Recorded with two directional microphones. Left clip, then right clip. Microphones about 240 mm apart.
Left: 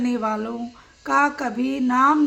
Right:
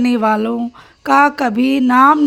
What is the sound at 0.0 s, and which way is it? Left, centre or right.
A woman's voice, right.